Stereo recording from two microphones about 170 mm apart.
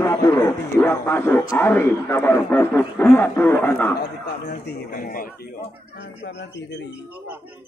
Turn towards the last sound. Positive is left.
turn(degrees=90)